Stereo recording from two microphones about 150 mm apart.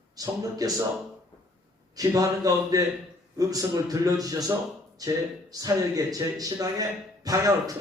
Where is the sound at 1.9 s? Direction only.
25° right (ahead or behind).